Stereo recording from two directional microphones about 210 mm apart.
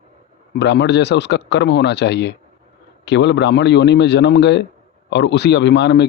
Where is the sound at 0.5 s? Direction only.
55° left (ahead or behind).